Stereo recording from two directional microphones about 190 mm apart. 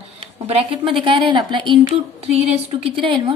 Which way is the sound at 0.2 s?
25° right (ahead or behind).